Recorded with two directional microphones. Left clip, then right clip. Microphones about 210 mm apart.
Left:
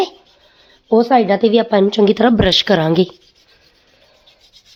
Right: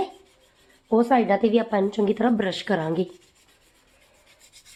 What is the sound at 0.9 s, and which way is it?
A woman's voice, 30° left (ahead or behind).